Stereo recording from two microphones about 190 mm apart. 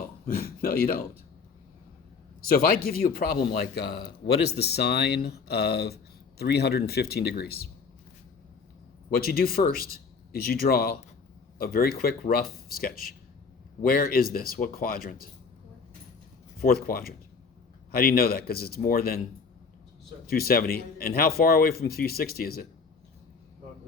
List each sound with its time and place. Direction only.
0.3 s a man's voice: 50° left (ahead or behind)
2.8 s a man's voice: 50° left (ahead or behind)
9.1 s a man's voice: 50° left (ahead or behind)
16.6 s a man's voice: 50° left (ahead or behind)
20.3 s a man's voice: 50° left (ahead or behind)